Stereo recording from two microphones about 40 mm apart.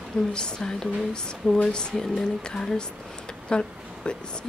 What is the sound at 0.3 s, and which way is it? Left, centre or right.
Speech, centre.